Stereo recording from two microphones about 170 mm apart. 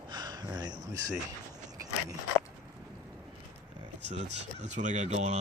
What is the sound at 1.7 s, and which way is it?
Biting, 20° right (ahead or behind).